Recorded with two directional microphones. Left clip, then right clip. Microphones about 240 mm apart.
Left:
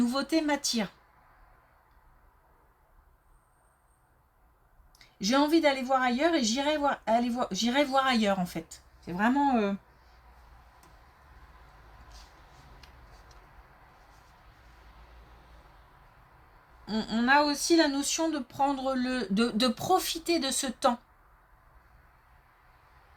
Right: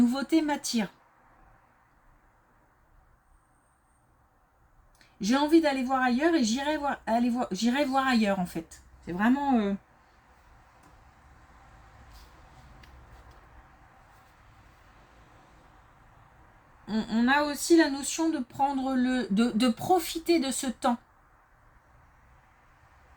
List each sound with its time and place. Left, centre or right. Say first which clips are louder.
0.0 s speech: right 2 dB; left
5.2 s speech: right 1 dB; left
16.8 s speech: right 1 dB; left